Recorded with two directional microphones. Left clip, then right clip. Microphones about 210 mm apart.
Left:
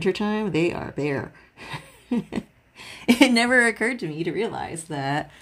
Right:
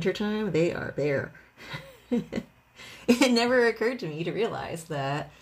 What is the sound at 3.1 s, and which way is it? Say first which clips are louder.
Speech: left 4 dB; 40° left (ahead or behind).